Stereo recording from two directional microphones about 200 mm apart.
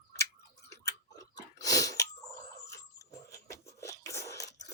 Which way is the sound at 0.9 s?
15° left (ahead or behind).